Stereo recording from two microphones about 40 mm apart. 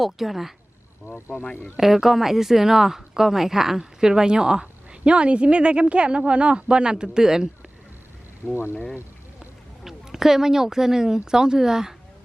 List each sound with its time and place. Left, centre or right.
0.0 s speech: centre
1.7 s speech: centre
4.9 s speech: right
8.4 s speech: left
9.8 s speech: centre